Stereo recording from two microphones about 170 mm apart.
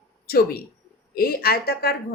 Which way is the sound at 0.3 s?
60° left (ahead or behind).